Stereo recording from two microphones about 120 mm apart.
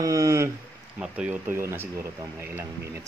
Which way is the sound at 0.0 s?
25° right (ahead or behind).